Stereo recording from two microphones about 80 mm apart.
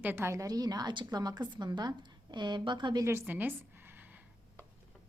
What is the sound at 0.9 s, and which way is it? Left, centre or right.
A woman's voice, right.